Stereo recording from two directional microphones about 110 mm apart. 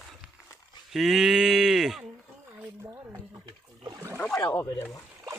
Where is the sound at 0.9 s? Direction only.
Centre (ahead or behind).